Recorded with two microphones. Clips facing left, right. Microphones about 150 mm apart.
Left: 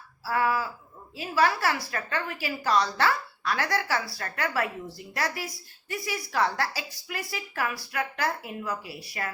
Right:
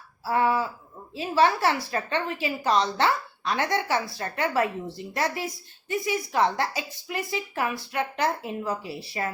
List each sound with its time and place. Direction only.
0.3 s a woman's voice: 25° right (ahead or behind)